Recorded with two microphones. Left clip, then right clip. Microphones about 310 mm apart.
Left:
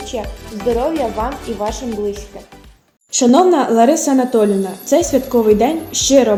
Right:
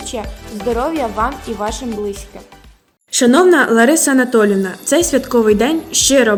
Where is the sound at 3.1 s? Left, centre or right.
Right.